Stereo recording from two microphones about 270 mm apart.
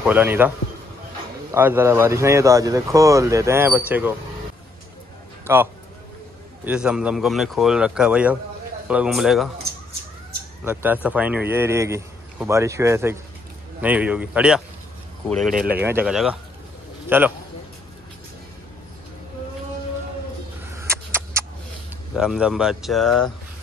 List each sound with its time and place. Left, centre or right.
0.0 s speech: centre
1.5 s speech: centre
5.5 s speech: centre
10.6 s speech: centre
20.7 s a sound: centre
22.1 s speech: centre